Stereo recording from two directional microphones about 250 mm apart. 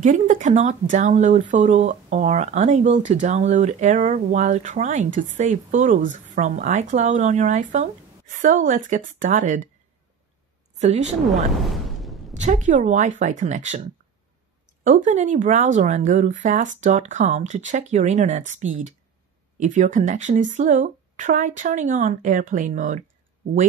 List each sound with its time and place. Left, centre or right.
0.0 s speech: right
10.8 s speech: right
11.2 s a sound: centre
12.4 s speech: right